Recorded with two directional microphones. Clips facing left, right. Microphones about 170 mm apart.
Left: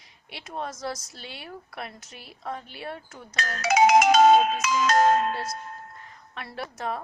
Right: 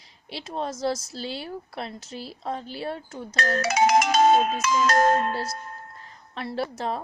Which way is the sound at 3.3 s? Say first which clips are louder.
Right 7 dB; 50° right (ahead or behind).